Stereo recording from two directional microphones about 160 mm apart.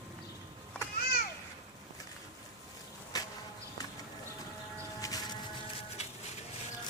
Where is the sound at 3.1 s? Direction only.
25° left (ahead or behind).